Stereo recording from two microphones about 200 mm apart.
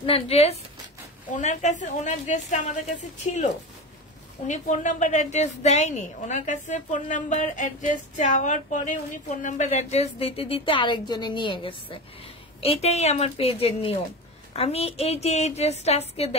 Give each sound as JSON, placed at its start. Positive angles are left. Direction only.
{"t": 0.0, "sound": "a woman's voice", "side_deg": 30}